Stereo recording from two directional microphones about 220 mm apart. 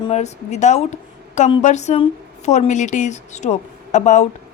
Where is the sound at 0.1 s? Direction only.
30° left (ahead or behind).